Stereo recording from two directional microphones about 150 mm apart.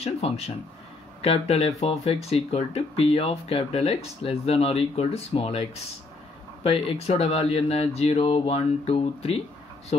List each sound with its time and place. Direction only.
0.0 s speech: 45° left (ahead or behind)